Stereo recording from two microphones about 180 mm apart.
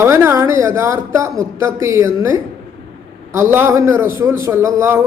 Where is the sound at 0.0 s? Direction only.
15° right (ahead or behind).